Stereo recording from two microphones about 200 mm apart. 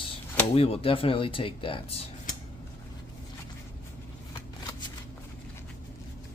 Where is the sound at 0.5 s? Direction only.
30° left (ahead or behind).